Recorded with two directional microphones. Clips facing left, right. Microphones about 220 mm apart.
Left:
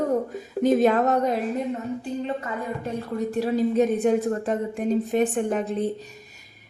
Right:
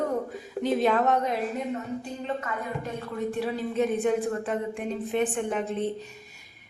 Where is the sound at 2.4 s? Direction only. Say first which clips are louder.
Left 2 dB; 35° left (ahead or behind).